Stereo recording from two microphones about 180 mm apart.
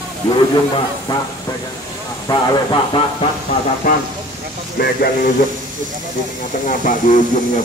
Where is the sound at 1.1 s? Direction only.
25° left (ahead or behind).